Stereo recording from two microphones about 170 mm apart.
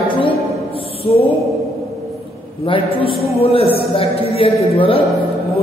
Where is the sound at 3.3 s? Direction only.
35° left (ahead or behind).